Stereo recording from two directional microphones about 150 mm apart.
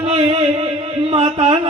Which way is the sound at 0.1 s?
40° right (ahead or behind).